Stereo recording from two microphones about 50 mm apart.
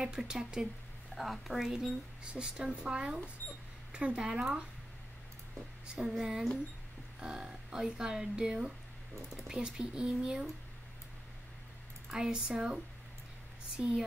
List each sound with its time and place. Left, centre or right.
0.0 s speech: centre
1.1 s speech: centre
2.2 s speech: centre
5.9 s speech: centre
7.2 s speech: centre
12.1 s speech: centre